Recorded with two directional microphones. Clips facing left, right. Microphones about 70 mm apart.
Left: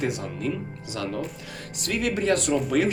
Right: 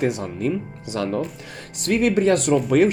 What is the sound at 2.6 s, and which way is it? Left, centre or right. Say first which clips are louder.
Speech: right 7 dB; right.